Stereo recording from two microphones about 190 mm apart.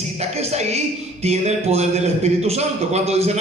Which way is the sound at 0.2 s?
35° right (ahead or behind).